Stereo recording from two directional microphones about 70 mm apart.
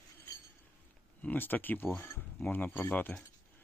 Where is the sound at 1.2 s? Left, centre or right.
Left.